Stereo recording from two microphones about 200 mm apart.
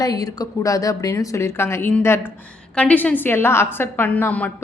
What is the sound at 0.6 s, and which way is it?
A woman's voice, 15° left (ahead or behind).